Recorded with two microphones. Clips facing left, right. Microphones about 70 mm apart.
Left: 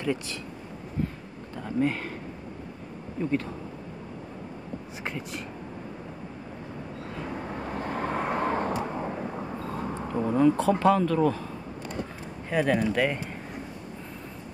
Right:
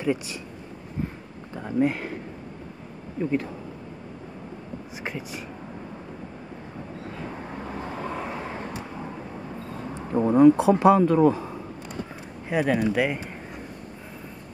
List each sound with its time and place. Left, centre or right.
0.0 s speech: centre
1.5 s speech: centre
3.2 s speech: centre
5.0 s speech: centre
7.9 s vehicle: left
10.1 s speech: right
12.4 s speech: centre